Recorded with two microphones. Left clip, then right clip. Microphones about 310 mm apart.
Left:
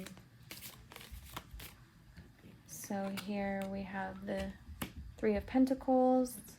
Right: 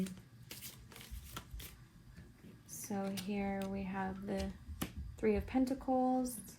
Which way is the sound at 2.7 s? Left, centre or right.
Left.